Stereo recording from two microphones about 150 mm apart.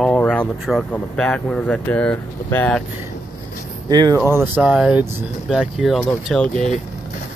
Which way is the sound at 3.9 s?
25° right (ahead or behind).